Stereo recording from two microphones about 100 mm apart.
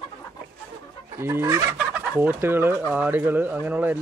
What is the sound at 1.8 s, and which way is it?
Fowl, 15° right (ahead or behind).